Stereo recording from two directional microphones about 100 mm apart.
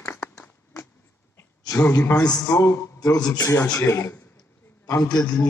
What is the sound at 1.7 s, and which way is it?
Speech, 25° left (ahead or behind).